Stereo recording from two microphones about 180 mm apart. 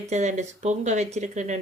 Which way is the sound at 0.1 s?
40° right (ahead or behind).